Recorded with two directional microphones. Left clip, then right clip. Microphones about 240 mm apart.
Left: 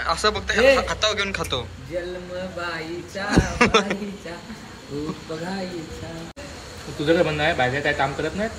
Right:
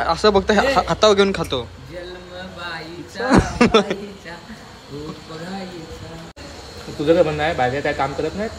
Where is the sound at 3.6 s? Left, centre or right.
Centre.